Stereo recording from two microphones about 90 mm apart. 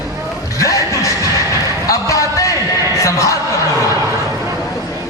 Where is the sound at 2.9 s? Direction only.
35° left (ahead or behind).